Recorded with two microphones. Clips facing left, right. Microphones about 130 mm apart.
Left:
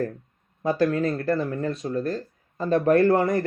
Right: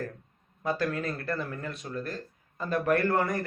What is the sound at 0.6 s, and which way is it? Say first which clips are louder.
A man's voice: left 8 dB; 25° left (ahead or behind).